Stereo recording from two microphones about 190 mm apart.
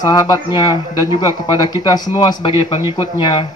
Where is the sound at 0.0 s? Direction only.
20° left (ahead or behind).